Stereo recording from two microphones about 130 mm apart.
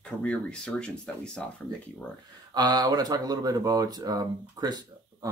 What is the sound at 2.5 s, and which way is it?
Speech, 30° right (ahead or behind).